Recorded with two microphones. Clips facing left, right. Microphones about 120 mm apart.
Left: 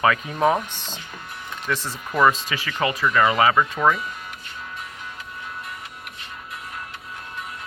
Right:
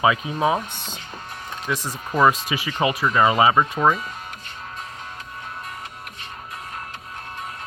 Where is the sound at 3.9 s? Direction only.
40° right (ahead or behind).